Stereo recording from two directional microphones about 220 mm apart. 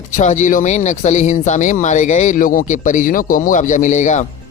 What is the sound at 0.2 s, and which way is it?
Speech, 35° left (ahead or behind).